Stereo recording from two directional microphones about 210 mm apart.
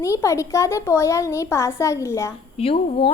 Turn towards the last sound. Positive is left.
turn(degrees=25)  # may be behind; listen again after turning